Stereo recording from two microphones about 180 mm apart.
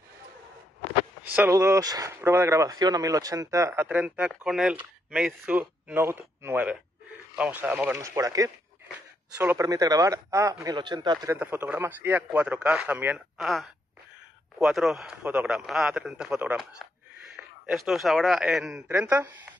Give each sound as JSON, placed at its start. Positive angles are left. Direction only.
{"t": 1.2, "sound": "speech", "side_deg": -10}
{"t": 11.3, "sound": "speech", "side_deg": -10}
{"t": 14.6, "sound": "a man's voice", "side_deg": 0}